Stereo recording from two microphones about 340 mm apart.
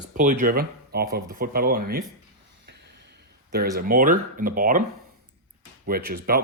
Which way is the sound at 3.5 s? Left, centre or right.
Right.